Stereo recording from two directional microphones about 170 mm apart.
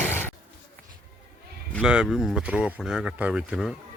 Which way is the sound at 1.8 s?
5° right (ahead or behind).